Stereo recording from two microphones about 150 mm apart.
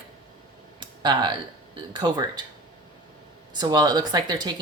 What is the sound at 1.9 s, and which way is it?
Speech, 30° right (ahead or behind).